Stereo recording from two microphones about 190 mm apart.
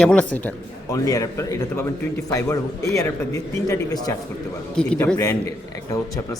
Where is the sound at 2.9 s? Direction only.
15° left (ahead or behind).